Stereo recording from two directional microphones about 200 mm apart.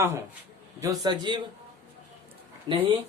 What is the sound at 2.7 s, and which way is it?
Speech, 25° right (ahead or behind).